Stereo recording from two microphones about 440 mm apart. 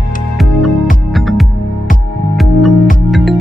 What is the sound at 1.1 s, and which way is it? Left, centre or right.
Music, centre.